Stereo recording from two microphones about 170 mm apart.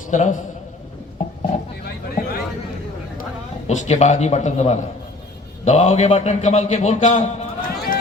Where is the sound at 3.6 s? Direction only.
45° left (ahead or behind).